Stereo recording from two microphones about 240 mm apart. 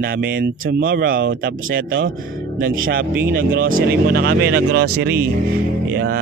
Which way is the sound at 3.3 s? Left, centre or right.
Right.